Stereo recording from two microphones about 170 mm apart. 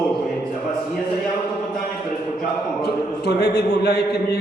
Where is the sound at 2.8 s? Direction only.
75° left (ahead or behind).